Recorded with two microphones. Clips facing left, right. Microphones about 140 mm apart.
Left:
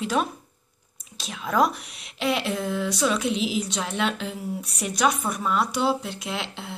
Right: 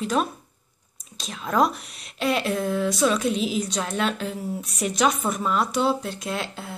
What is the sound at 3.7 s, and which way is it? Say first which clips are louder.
Speech: right 1 dB; 15° left (ahead or behind).